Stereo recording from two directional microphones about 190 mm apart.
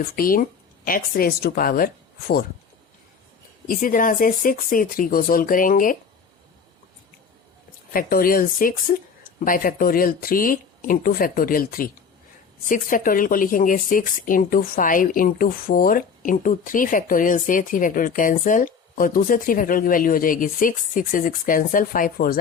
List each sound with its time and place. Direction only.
0.0 s speech: 50° left (ahead or behind)
3.7 s speech: 45° left (ahead or behind)
7.9 s speech: 50° left (ahead or behind)